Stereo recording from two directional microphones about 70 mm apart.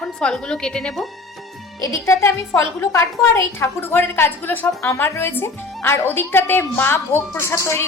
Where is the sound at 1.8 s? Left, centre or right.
Left.